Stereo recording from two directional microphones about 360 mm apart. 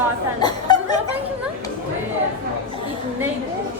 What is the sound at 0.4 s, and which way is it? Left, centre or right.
Chuckle, centre.